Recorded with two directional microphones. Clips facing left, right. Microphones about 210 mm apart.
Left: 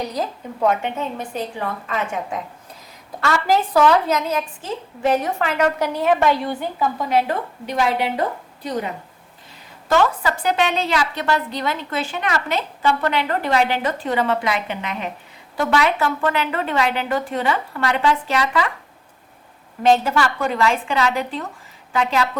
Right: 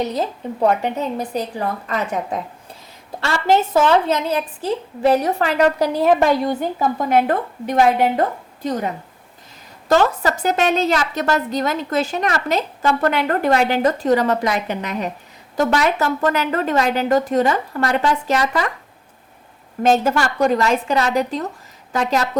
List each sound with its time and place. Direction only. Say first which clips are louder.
0.0 s a woman's voice: right 4 dB; 25° right (ahead or behind); by 8.2 s 50° right (ahead or behind)
9.9 s a woman's voice: right 2 dB; 40° right (ahead or behind)
19.8 s a woman's voice: right 1 dB; 45° right (ahead or behind)